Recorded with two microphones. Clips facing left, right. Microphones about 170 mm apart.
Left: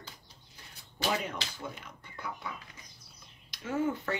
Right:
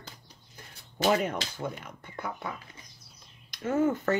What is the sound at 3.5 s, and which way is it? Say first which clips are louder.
Speech: right 5 dB; 45° right (ahead or behind).